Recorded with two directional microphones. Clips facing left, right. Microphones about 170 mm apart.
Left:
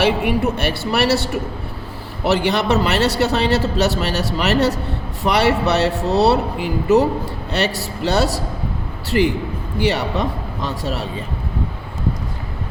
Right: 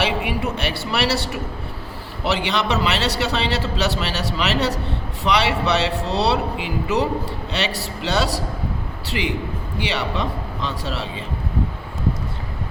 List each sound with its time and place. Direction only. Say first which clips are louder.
0.0 s a man's voice: left 5 dB; 50° left (ahead or behind)